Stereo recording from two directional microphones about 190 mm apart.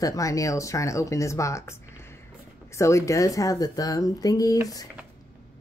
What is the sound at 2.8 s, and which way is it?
Speech, 15° left (ahead or behind).